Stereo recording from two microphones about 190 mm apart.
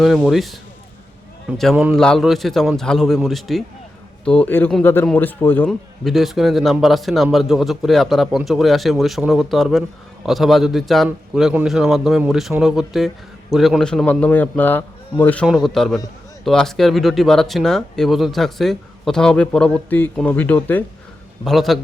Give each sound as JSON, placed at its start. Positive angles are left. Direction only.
{"t": 0.0, "sound": "a man's voice", "side_deg": 0}
{"t": 1.7, "sound": "a man's voice", "side_deg": -5}